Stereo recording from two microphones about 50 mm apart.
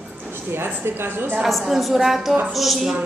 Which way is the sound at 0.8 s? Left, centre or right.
Right.